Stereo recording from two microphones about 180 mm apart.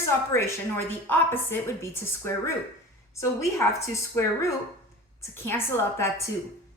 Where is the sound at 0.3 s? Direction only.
15° left (ahead or behind).